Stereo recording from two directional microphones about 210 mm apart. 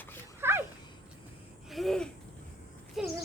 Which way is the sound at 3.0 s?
Centre (ahead or behind).